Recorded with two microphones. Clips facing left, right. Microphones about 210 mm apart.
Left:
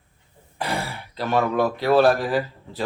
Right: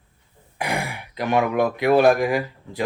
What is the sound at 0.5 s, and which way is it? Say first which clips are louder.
Speech: right 1 dB; 15° right (ahead or behind).